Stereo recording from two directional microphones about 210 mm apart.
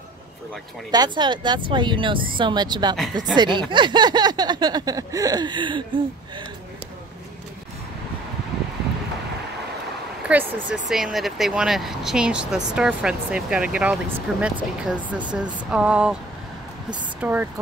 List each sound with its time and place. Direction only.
0.9 s a sound: 20° right (ahead or behind)
10.2 s speech: 5° right (ahead or behind)
17.2 s speech: 10° right (ahead or behind)